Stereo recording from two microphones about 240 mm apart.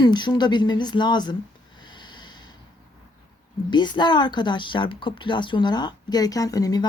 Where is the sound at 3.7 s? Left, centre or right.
Centre.